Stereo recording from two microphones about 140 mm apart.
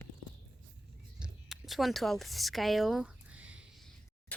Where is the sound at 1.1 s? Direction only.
5° right (ahead or behind).